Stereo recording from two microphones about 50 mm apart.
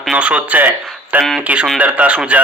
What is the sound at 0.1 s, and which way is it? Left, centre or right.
A man's voice, right.